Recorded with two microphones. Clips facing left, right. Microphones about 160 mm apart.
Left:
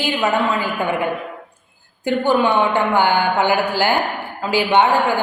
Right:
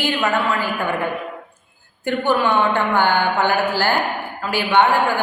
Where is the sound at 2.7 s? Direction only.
15° left (ahead or behind).